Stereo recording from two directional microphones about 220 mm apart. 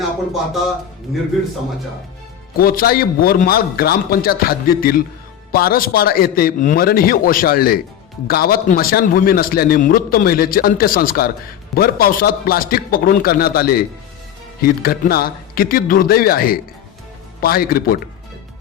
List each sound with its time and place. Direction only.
2.6 s a man's voice: 45° left (ahead or behind)